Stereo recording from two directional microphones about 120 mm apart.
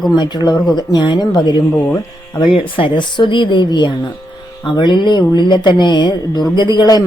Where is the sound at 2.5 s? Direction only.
45° left (ahead or behind).